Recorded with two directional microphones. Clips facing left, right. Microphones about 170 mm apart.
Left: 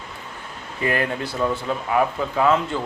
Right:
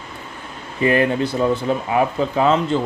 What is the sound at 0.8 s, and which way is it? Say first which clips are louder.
Speech: right 7 dB; 20° right (ahead or behind).